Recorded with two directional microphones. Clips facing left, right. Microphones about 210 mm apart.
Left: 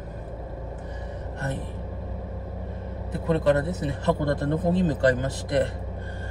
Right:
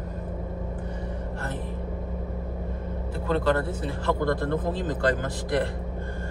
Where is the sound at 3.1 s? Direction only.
20° left (ahead or behind).